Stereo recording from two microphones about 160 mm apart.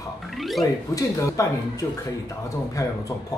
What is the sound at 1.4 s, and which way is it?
Speech, 20° left (ahead or behind).